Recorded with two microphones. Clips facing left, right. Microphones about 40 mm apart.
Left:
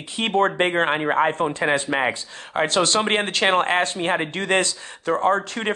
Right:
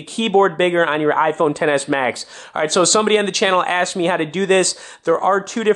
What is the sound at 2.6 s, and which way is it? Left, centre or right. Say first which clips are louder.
Speech: right 5 dB; centre.